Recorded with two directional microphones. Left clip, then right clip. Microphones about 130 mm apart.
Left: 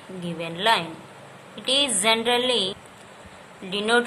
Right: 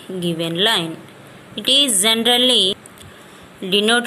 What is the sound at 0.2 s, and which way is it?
A woman's voice, 30° right (ahead or behind).